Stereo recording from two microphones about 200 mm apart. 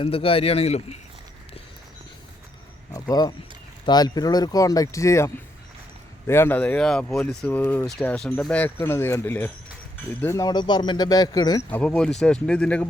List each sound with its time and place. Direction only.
0.0 s speech: 30° left (ahead or behind)
2.9 s a sound: 20° left (ahead or behind)
3.8 s speech: 20° left (ahead or behind)
11.7 s speech: 5° left (ahead or behind)